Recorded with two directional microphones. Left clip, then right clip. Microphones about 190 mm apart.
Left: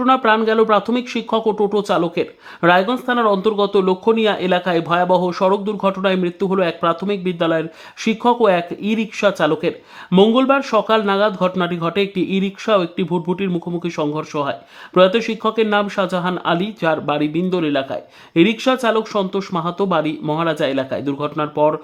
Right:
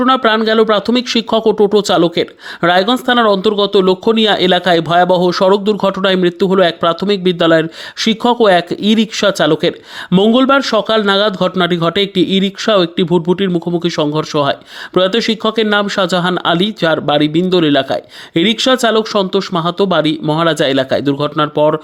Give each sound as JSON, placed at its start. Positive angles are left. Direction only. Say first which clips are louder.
{"t": 0.0, "sound": "speech", "louder": "right 3 dB", "side_deg": -25}